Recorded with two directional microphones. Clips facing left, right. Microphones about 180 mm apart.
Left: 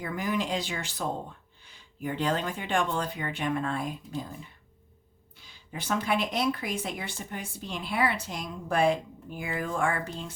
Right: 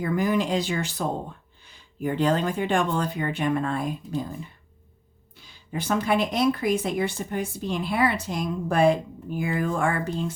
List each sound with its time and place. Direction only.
0.0 s a woman's voice: 45° right (ahead or behind)
2.0 s a woman's voice: 45° right (ahead or behind)
5.7 s a woman's voice: 45° right (ahead or behind)